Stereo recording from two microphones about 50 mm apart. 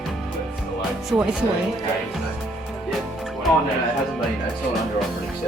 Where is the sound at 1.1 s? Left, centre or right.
Centre.